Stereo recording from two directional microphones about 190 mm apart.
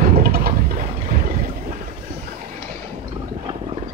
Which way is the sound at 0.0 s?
50° right (ahead or behind).